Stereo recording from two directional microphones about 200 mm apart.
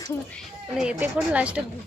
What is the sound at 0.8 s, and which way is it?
Speech, 5° right (ahead or behind).